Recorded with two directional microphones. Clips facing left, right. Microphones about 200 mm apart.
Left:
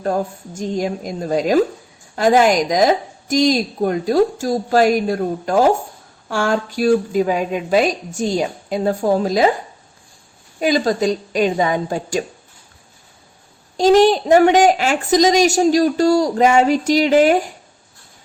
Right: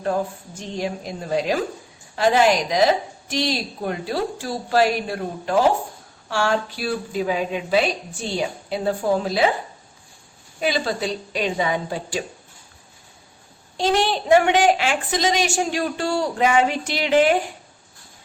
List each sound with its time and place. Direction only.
0.0 s a woman's voice: 45° left (ahead or behind)
10.6 s a woman's voice: 45° left (ahead or behind)
13.7 s a woman's voice: 40° left (ahead or behind)